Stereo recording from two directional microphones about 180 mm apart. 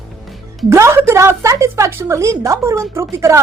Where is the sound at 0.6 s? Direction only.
15° right (ahead or behind).